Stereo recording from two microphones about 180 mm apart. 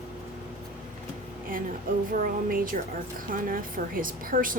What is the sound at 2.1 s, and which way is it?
A woman's voice, 50° right (ahead or behind).